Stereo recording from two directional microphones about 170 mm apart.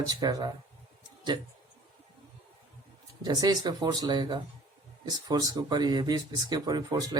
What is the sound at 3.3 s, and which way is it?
Speech, 25° right (ahead or behind).